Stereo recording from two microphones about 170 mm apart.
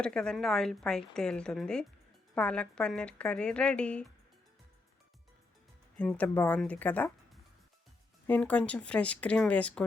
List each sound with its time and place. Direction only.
0.0 s a woman's voice: 5° left (ahead or behind)
6.0 s a woman's voice: 10° left (ahead or behind)
8.3 s a woman's voice: 10° left (ahead or behind)